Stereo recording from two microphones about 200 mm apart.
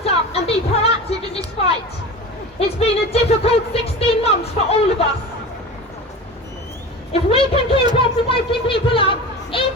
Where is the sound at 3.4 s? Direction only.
30° left (ahead or behind).